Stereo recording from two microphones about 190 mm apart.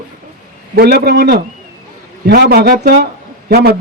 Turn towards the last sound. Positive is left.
turn(degrees=-55)  # may be behind; listen again after turning